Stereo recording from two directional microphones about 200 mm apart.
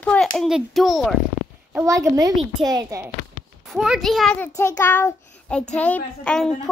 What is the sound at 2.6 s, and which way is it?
Child singing, 20° right (ahead or behind).